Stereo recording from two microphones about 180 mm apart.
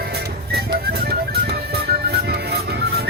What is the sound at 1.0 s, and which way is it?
Music, 60° right (ahead or behind).